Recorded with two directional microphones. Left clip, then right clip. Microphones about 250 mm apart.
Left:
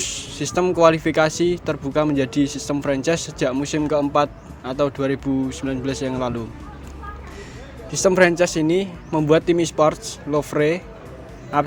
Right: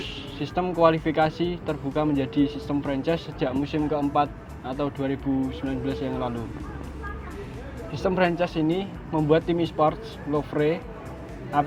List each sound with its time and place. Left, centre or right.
0.0 s speech: left
7.9 s speech: left